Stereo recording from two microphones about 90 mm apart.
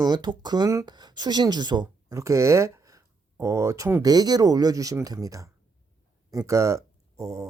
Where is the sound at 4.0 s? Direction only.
45° right (ahead or behind).